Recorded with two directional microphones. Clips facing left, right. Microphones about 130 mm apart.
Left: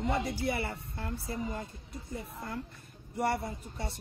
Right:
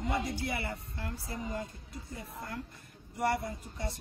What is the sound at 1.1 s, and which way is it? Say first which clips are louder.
Speech: left 2 dB; 25° left (ahead or behind).